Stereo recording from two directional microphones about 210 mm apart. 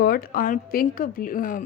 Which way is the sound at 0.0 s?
45° left (ahead or behind).